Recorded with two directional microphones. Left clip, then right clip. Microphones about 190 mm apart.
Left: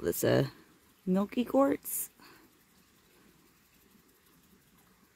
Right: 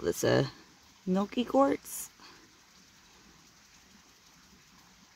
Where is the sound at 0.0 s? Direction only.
25° left (ahead or behind).